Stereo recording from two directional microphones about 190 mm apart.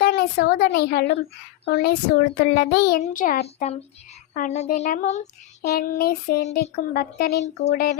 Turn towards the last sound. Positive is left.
turn(degrees=55)  # may be behind; listen again after turning